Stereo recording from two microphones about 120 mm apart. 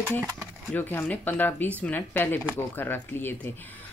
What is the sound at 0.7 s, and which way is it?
Speech, 15° left (ahead or behind).